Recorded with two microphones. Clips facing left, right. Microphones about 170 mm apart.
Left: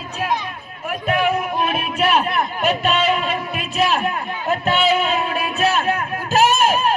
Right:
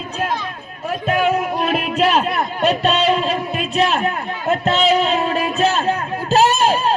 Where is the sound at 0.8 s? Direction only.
40° right (ahead or behind).